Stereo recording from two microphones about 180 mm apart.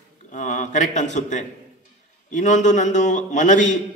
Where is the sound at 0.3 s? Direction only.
45° left (ahead or behind).